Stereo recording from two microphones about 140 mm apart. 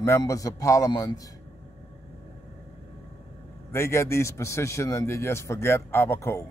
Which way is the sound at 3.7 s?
20° left (ahead or behind).